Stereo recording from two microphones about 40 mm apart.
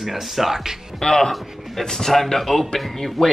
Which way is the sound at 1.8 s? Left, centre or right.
Centre.